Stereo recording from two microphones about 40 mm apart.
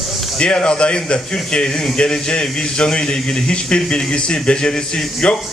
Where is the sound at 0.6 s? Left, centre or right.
Left.